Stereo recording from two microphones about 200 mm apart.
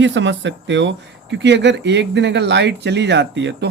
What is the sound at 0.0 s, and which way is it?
Speech, 65° right (ahead or behind).